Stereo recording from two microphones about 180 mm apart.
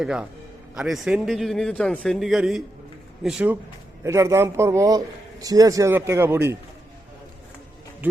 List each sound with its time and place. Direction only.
0.0 s a man's voice: 5° right (ahead or behind)